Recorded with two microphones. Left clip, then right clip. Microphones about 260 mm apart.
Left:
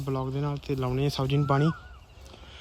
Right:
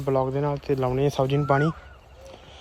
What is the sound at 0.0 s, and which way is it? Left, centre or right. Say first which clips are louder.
Speech: right 8 dB; left.